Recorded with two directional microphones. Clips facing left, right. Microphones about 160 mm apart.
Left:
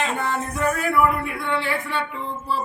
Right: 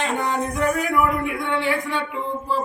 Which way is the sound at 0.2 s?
15° right (ahead or behind).